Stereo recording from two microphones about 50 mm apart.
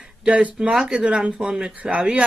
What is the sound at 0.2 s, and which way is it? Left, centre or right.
Speech, right.